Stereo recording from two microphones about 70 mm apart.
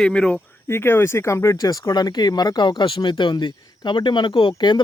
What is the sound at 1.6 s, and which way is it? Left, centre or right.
Speech, left.